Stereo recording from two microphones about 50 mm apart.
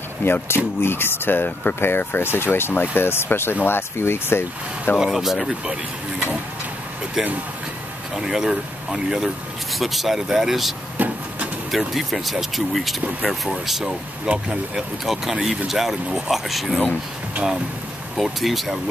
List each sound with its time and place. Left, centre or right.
0.2 s speech: left
4.9 s speech: centre
7.2 s speech: centre
9.2 s speech: centre
11.0 s vehicle: right
11.8 s speech: centre
14.2 s speech: centre
15.0 s speech: centre
18.1 s speech: centre